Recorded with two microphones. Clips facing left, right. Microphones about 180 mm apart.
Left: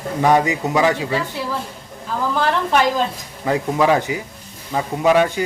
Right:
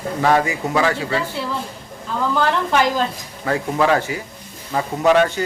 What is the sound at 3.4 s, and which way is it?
A man's voice, 15° left (ahead or behind).